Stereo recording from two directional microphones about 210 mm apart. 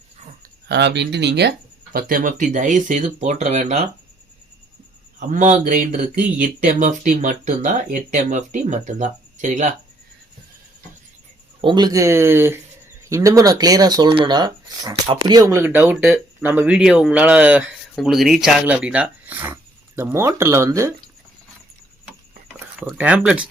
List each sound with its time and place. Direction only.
0.7 s speech: 55° right (ahead or behind); by 3.8 s 35° right (ahead or behind)
5.3 s speech: 35° right (ahead or behind)
11.6 s speech: 20° right (ahead or behind)
22.8 s speech: 5° right (ahead or behind)